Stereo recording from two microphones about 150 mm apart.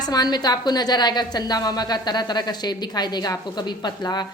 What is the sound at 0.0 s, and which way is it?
A woman's voice, 25° left (ahead or behind).